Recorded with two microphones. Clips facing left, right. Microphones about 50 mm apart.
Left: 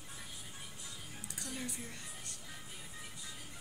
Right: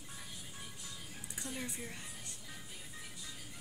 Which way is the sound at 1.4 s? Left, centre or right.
Right.